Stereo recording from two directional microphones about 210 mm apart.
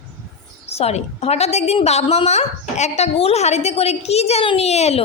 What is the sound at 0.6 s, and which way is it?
A woman's voice, 30° left (ahead or behind).